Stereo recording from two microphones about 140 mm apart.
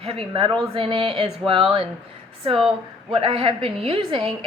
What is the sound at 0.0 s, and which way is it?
A woman's voice, 40° right (ahead or behind).